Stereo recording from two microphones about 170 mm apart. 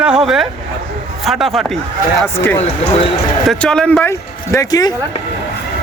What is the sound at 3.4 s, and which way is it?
Speech, 5° left (ahead or behind).